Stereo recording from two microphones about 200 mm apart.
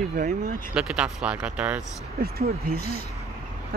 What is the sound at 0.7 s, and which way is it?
Speech, 5° right (ahead or behind).